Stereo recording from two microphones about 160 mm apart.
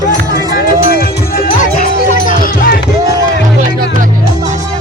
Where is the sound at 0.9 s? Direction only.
70° left (ahead or behind).